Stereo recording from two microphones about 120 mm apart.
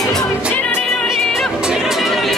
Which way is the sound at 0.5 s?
15° left (ahead or behind).